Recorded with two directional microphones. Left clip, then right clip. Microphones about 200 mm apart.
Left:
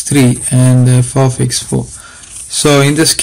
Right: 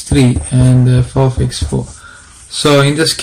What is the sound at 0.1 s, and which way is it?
Speech, 30° left (ahead or behind).